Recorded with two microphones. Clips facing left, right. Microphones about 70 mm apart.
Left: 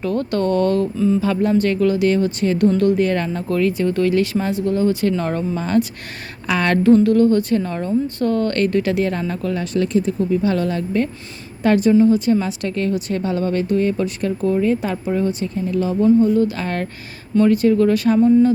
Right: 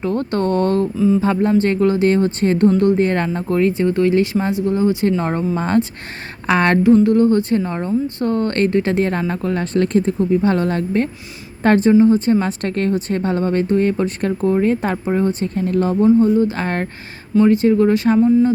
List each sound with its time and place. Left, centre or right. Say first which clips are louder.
0.0 s a woman's voice: right 1 dB; right
0.9 s speech: right 2 dB; centre
1.2 s a woman's voice: right 2 dB; right
2.6 s a woman's voice: right 1 dB; right
6.8 s a woman's voice: left 1 dB; centre; by 16.0 s right
16.0 s speech: even; right
18.2 s speech: left 2 dB; centre